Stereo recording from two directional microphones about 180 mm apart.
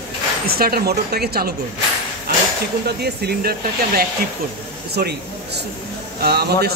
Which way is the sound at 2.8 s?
65° right (ahead or behind).